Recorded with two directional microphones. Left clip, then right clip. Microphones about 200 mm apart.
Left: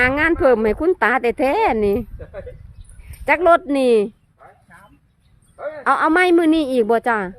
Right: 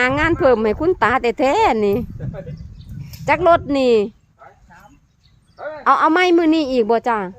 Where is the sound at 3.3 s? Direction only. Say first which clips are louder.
Even; 10° left (ahead or behind).